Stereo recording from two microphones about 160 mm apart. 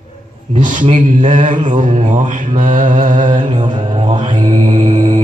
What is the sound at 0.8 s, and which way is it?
Mantra, 50° right (ahead or behind).